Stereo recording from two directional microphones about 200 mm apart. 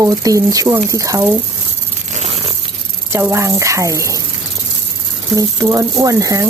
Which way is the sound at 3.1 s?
10° right (ahead or behind).